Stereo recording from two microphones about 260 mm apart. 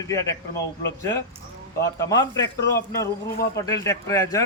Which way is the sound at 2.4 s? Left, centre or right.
Left.